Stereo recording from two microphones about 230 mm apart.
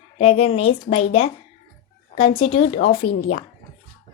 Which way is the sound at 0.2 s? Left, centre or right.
Left.